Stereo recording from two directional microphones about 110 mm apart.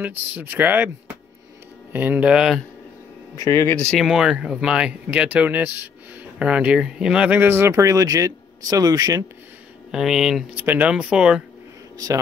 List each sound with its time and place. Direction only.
0.0 s speech: 15° right (ahead or behind)
3.3 s speech: 30° left (ahead or behind)
3.9 s speech: 5° right (ahead or behind)
7.3 s speech: 20° right (ahead or behind)
9.8 s speech: 5° right (ahead or behind)
10.5 s speech: 15° right (ahead or behind)